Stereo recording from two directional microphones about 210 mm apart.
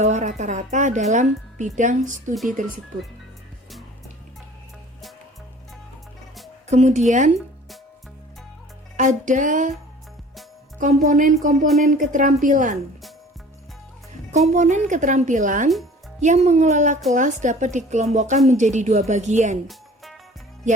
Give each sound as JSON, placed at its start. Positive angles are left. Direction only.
{"t": 0.0, "sound": "a woman's voice", "side_deg": -35}
{"t": 6.7, "sound": "a woman's voice", "side_deg": -35}
{"t": 9.0, "sound": "a woman's voice", "side_deg": -35}
{"t": 10.8, "sound": "a woman's voice", "side_deg": -40}
{"t": 14.3, "sound": "a woman's voice", "side_deg": -35}